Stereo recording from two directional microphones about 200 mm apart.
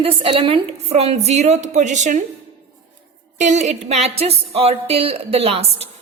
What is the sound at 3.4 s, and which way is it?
Speech, 35° right (ahead or behind).